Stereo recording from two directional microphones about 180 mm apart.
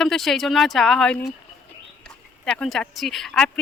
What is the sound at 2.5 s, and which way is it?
Speech, centre (ahead or behind).